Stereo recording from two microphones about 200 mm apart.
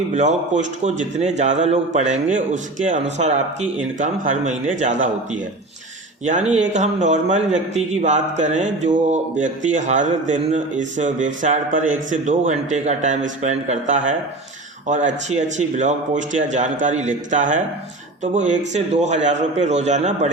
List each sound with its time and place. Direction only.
0.1 s a man's voice: 35° right (ahead or behind)